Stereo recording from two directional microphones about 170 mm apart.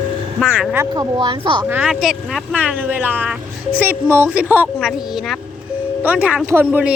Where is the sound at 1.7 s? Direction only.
10° right (ahead or behind).